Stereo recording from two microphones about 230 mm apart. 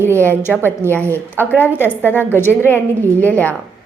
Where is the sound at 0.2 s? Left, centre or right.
Centre.